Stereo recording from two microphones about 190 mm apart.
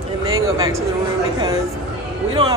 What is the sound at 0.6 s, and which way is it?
Speech, 15° right (ahead or behind).